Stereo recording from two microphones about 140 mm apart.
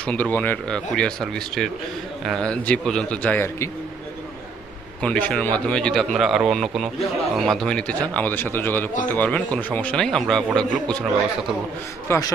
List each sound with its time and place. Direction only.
0.0 s speech: 10° left (ahead or behind)
5.0 s a man's voice: 5° left (ahead or behind)
12.1 s a man's voice: 20° left (ahead or behind)